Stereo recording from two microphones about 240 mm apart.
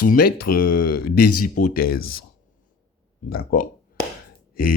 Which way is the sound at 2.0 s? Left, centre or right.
Left.